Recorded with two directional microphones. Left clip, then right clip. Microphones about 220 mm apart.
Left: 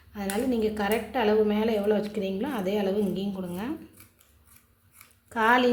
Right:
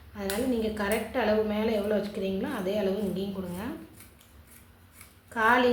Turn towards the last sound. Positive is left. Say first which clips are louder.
# left 1 dB
turn(degrees=40)  # may be behind; listen again after turning